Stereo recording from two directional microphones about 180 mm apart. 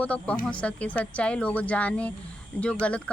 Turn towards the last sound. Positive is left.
turn(degrees=5)  # may be behind; listen again after turning